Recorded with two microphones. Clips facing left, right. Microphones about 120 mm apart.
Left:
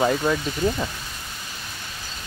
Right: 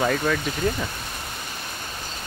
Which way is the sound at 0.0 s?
15° left (ahead or behind).